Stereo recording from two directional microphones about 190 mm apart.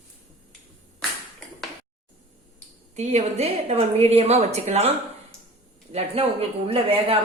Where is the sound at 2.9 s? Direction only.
35° right (ahead or behind).